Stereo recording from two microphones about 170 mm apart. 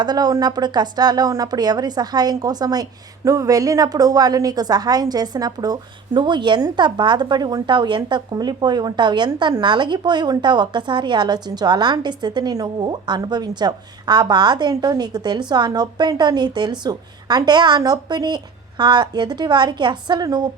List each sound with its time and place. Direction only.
0.0 s a woman's voice: 25° right (ahead or behind)